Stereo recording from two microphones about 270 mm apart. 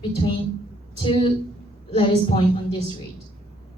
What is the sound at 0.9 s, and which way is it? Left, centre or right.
A woman's voice, centre.